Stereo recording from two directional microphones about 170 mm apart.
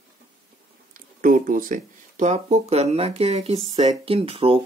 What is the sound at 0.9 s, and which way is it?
Speech, 55° right (ahead or behind).